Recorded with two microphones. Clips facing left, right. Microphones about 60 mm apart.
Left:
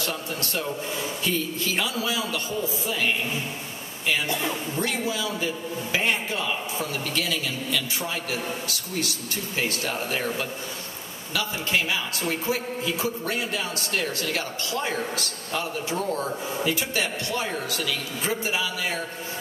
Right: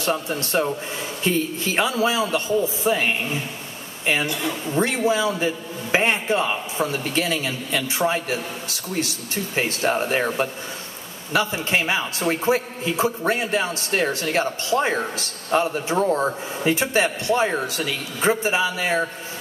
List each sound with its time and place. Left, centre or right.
0.0 s a man's voice: right
4.3 s a woman's voice: left
4.6 s a man's voice: right